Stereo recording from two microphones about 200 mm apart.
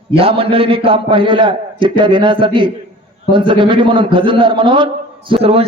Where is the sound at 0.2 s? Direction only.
30° right (ahead or behind).